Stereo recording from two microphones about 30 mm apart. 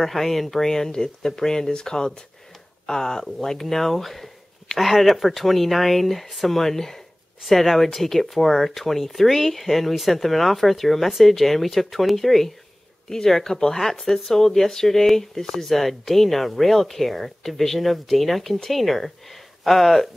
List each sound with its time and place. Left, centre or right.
0.0 s speech: centre; by 3.3 s left
3.3 s speech: centre